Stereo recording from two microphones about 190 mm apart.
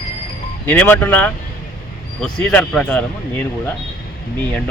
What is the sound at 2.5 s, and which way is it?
Speech, 5° left (ahead or behind).